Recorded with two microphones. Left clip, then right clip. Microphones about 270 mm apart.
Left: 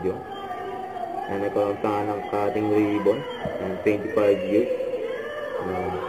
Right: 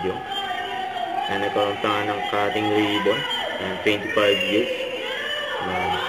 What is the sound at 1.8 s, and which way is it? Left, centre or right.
Music, centre.